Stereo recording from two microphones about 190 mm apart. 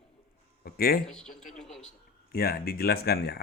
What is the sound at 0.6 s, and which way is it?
Speech, 55° left (ahead or behind).